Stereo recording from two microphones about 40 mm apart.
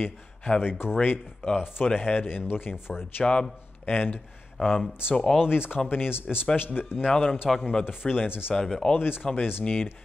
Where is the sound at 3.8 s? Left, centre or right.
Left.